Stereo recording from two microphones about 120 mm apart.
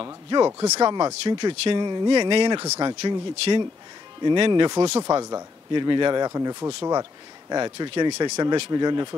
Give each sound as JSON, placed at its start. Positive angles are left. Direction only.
{"t": 0.0, "sound": "speech", "side_deg": -35}
{"t": 5.0, "sound": "speech", "side_deg": -30}